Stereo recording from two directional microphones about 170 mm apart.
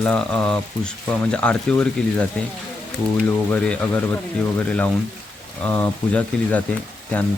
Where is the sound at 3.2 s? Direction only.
5° left (ahead or behind).